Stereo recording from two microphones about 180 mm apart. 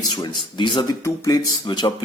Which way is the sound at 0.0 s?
25° left (ahead or behind).